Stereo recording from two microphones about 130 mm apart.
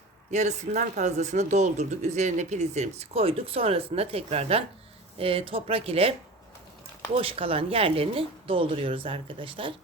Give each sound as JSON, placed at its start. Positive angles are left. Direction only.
{"t": 0.3, "sound": "speech", "side_deg": -65}